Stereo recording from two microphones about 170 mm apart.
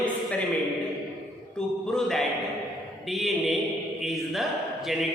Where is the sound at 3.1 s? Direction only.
Centre (ahead or behind).